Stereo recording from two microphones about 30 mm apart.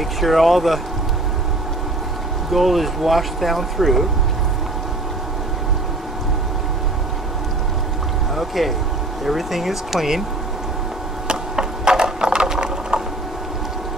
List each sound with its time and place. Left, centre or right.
0.2 s speech: centre
2.5 s speech: centre
8.4 s speech: centre
11.2 s ratchet: right